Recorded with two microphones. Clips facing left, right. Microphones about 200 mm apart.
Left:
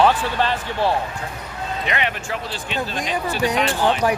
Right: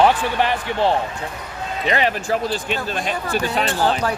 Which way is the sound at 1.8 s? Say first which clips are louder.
Right 5 dB; 35° right (ahead or behind).